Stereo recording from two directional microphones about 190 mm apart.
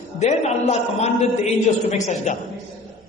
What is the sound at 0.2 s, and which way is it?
A man's voice, 35° left (ahead or behind).